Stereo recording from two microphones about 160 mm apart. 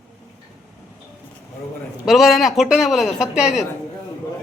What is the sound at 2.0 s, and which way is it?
Speech, centre (ahead or behind).